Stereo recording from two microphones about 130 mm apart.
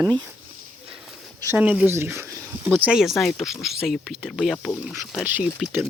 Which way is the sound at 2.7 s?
5° right (ahead or behind).